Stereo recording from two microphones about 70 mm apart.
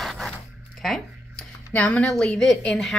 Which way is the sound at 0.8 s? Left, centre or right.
Centre.